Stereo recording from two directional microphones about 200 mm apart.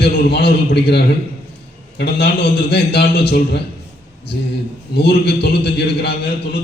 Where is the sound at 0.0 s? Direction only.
55° left (ahead or behind).